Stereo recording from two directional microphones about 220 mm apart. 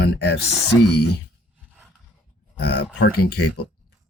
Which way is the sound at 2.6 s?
50° left (ahead or behind).